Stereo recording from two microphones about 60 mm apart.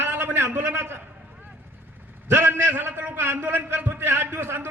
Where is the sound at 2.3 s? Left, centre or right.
Right.